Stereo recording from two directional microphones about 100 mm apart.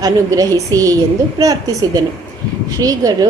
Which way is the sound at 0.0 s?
35° right (ahead or behind).